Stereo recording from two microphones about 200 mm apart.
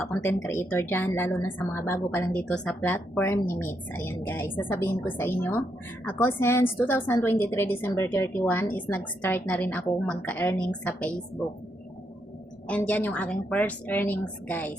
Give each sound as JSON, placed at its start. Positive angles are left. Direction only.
{"t": 0.0, "sound": "a woman's voice", "side_deg": 5}
{"t": 12.6, "sound": "a woman's voice", "side_deg": 5}